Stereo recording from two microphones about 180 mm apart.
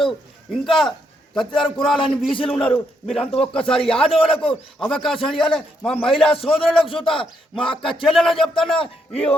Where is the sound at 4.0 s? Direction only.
30° left (ahead or behind).